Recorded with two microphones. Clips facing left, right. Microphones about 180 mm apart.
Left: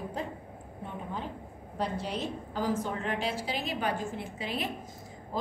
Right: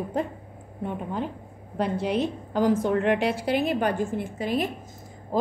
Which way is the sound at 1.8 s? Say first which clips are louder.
Right 8 dB; 60° right (ahead or behind).